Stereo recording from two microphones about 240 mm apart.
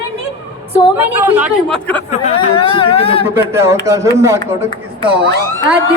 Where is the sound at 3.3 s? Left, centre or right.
Centre.